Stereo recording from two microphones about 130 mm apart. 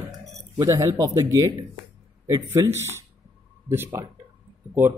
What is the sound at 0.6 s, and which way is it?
Speech, 25° right (ahead or behind).